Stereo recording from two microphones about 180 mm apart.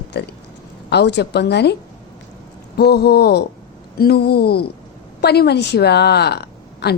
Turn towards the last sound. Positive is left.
turn(degrees=65)  # may be behind; listen again after turning